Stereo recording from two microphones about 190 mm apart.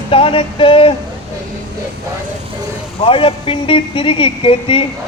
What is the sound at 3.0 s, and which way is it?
Speech, 30° left (ahead or behind).